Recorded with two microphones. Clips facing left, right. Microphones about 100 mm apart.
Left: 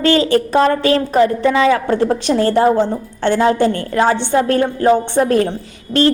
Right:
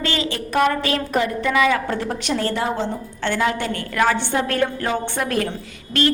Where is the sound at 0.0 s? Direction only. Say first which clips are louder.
Left 11 dB; 40° left (ahead or behind).